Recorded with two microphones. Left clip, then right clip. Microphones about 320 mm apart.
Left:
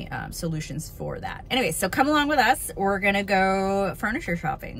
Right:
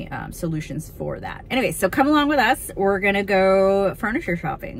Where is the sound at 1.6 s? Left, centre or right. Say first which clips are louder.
Right 4 dB; centre.